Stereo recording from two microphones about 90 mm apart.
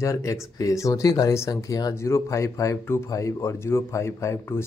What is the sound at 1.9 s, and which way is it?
Speech, 30° left (ahead or behind).